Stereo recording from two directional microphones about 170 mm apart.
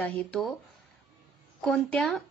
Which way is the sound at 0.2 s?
5° left (ahead or behind).